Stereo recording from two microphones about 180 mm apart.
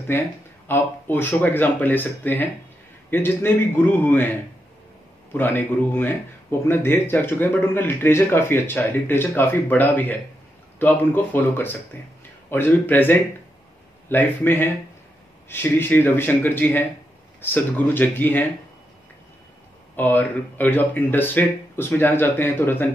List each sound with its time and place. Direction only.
0.7 s speech: 10° left (ahead or behind)
5.3 s speech: 10° left (ahead or behind)
20.0 s speech: 10° left (ahead or behind)